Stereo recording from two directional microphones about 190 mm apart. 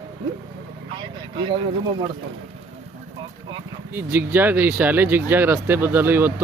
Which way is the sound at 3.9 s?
10° right (ahead or behind).